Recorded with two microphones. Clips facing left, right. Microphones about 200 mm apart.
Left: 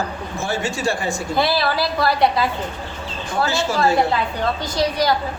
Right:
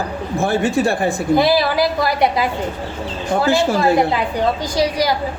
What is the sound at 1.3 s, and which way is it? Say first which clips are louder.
A woman's voice: right 4 dB; 15° right (ahead or behind).